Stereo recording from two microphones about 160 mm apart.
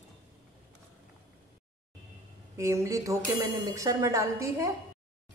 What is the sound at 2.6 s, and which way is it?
A woman's voice, 15° right (ahead or behind).